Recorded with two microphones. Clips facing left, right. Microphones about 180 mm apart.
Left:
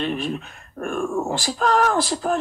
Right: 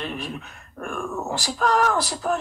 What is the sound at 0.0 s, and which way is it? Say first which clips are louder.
Speech: left 6 dB; 30° left (ahead or behind).